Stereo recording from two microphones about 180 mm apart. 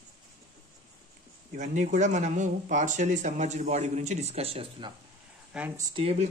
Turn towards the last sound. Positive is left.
turn(degrees=-30)  # may be behind; listen again after turning